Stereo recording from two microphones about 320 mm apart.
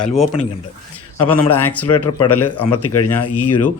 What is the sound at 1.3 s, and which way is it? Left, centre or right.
Speech, centre.